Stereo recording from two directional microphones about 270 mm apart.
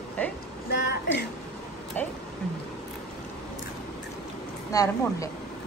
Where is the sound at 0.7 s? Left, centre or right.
Left.